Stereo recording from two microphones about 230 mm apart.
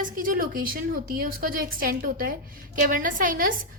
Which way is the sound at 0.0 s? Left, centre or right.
Right.